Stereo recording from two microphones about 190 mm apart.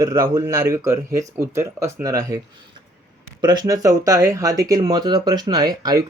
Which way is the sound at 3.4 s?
20° right (ahead or behind).